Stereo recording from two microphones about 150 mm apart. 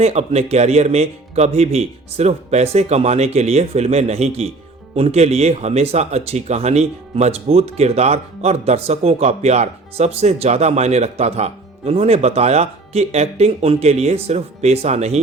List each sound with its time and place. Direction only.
0.0 s speech: 45° right (ahead or behind)